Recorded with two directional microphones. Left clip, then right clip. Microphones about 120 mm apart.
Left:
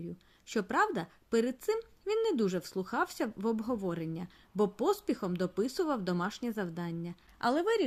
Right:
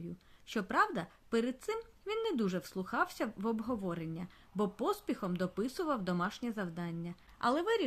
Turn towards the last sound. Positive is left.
turn(degrees=30)  # may be behind; listen again after turning